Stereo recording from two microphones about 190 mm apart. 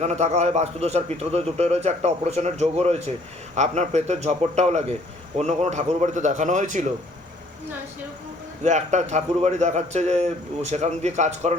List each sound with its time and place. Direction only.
0.0 s a man's voice: 35° right (ahead or behind)
8.6 s a man's voice: 40° right (ahead or behind)